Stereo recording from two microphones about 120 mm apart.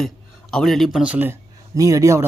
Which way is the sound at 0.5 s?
Centre (ahead or behind).